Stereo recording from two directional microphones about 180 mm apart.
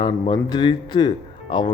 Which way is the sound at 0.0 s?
25° left (ahead or behind).